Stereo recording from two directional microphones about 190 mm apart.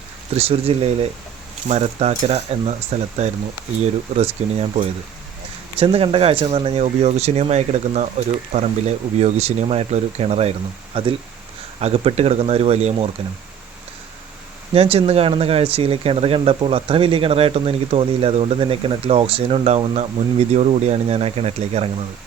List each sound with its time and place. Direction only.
0.3 s speech: 30° right (ahead or behind)
14.7 s speech: 30° right (ahead or behind)